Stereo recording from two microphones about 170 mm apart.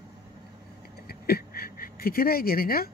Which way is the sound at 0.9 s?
65° left (ahead or behind).